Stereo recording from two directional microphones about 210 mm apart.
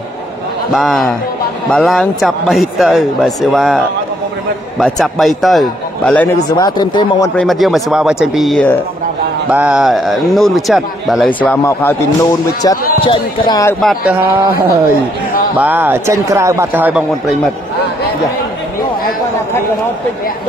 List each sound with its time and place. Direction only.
0.7 s speech: centre (ahead or behind)
6.5 s speech: 20° left (ahead or behind)
7.3 s a man's voice: centre (ahead or behind)
13.0 s speech: 25° left (ahead or behind)
13.7 s speech: centre (ahead or behind)
15.6 s a man's voice: 10° right (ahead or behind)